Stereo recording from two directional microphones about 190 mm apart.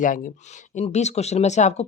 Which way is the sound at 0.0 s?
45° left (ahead or behind).